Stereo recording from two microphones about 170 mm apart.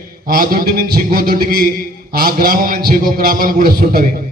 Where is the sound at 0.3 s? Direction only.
60° right (ahead or behind).